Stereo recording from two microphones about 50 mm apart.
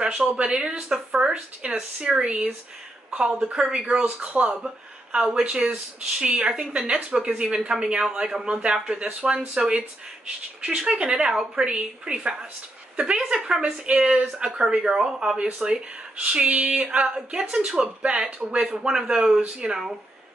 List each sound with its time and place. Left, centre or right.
0.0 s speech: centre
1.8 s a woman's voice: centre
15.3 s speech: right